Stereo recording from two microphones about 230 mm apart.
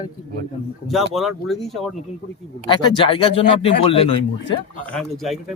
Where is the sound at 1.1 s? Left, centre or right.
Centre.